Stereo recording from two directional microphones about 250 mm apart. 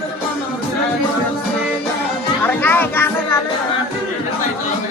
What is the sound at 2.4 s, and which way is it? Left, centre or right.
Music, centre.